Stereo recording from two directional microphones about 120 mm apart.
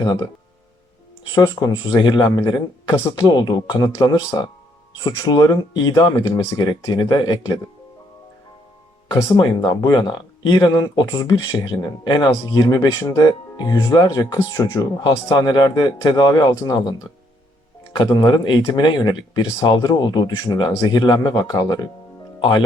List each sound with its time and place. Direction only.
0.0 s speech: 35° left (ahead or behind)
1.4 s speech: 35° left (ahead or behind)
9.0 s speech: 35° left (ahead or behind)
17.9 s speech: 40° left (ahead or behind)